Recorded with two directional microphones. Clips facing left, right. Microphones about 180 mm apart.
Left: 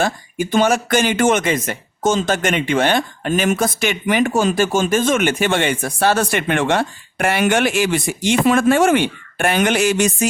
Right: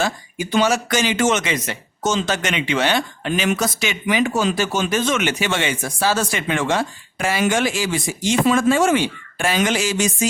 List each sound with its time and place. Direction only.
0.0 s speech: 50° left (ahead or behind)